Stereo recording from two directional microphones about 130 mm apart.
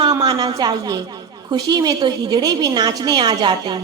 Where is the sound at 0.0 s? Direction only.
35° right (ahead or behind).